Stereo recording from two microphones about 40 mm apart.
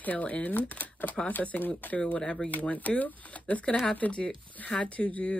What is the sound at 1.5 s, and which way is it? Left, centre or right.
Speech, left.